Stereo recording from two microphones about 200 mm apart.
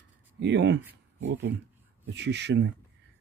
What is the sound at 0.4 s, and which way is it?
Speech, 60° right (ahead or behind).